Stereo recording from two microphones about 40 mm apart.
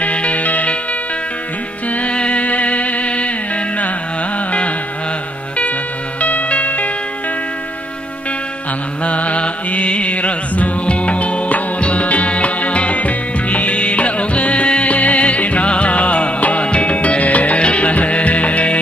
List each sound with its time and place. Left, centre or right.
0.0 s music: left
2.0 s music: left
4.5 s music: left
6.2 s music: left
9.0 s music: left